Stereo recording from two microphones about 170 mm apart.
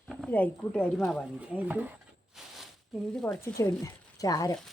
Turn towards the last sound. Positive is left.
turn(degrees=20)  # may be behind; listen again after turning